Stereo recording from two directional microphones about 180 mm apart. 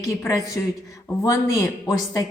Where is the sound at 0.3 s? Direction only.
15° left (ahead or behind).